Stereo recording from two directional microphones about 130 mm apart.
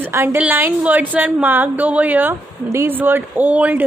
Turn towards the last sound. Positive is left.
turn(degrees=-15)  # may be behind; listen again after turning